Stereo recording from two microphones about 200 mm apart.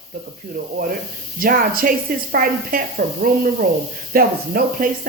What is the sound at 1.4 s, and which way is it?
Speech, 45° right (ahead or behind).